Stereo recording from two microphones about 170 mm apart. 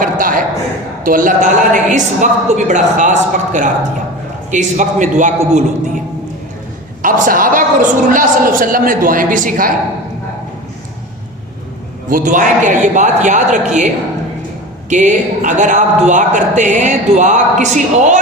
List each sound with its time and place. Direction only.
0.0 s a sound: 55° right (ahead or behind)
1.0 s a man's voice: 50° right (ahead or behind)
7.0 s a man's voice: 55° right (ahead or behind)
12.0 s a man's voice: 50° right (ahead or behind)